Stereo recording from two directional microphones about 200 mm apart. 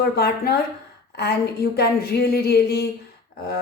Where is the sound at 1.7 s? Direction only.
50° left (ahead or behind).